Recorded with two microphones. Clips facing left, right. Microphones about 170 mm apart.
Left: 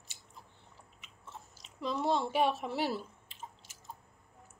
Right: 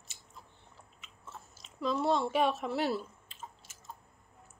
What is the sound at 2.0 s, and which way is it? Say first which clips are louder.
Speech: even; 10° left (ahead or behind).